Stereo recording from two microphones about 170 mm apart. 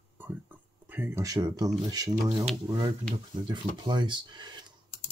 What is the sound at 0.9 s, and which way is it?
Speech, 15° right (ahead or behind).